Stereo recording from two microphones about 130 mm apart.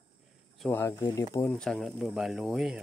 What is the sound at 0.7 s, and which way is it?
Speech, 20° left (ahead or behind).